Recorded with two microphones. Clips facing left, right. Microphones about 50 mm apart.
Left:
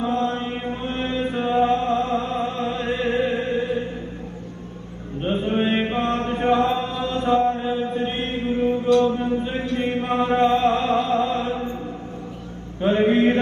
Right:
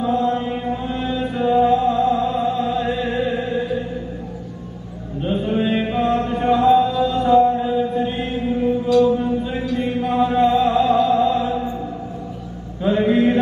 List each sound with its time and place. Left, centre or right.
0.0 s mantra: left
3.3 s music: left
5.2 s mantra: left
13.0 s mantra: left